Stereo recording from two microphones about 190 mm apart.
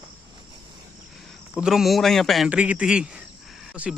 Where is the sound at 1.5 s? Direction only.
Centre (ahead or behind).